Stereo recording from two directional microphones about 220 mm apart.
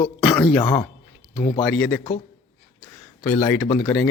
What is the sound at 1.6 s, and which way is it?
Speech, 5° left (ahead or behind).